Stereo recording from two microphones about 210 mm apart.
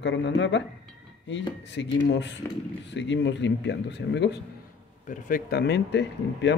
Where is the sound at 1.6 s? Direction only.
60° left (ahead or behind).